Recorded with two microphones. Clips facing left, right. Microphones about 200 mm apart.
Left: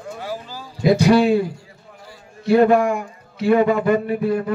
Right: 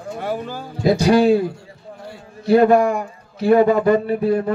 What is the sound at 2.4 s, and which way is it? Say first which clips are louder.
A man's voice: right 1 dB; 35° right (ahead or behind).